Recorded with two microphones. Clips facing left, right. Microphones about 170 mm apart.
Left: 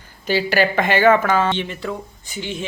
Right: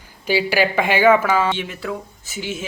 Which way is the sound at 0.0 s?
10° right (ahead or behind).